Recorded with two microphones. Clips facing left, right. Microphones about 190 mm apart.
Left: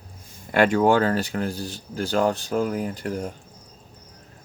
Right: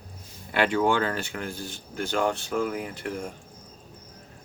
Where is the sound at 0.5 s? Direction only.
45° left (ahead or behind).